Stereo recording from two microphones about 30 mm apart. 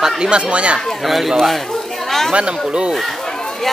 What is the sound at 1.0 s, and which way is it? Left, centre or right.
Speech, centre.